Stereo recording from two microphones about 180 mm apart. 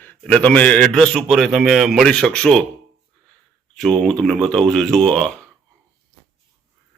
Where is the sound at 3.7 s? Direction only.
5° left (ahead or behind).